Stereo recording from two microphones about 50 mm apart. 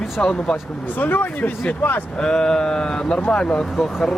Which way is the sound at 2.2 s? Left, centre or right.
Centre.